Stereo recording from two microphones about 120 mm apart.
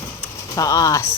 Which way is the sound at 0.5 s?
30° left (ahead or behind).